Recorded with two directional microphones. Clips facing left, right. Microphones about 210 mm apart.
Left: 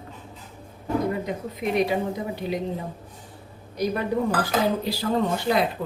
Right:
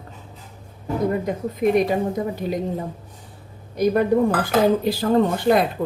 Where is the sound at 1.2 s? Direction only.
45° right (ahead or behind).